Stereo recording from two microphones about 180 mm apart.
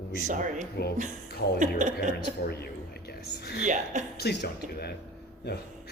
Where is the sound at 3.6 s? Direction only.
45° right (ahead or behind).